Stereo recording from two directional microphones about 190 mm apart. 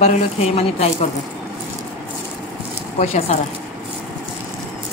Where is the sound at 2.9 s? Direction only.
35° left (ahead or behind).